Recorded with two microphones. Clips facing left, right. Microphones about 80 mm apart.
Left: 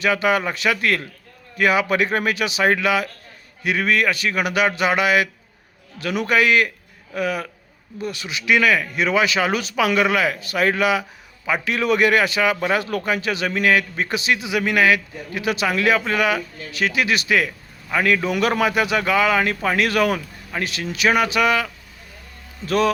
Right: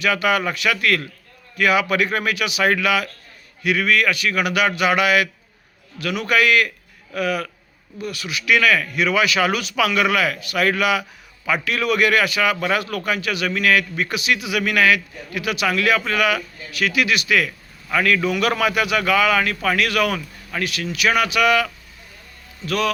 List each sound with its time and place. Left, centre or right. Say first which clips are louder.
0.0 s a man's voice: even; left